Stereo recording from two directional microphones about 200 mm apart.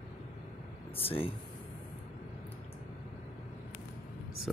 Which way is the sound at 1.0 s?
30° left (ahead or behind).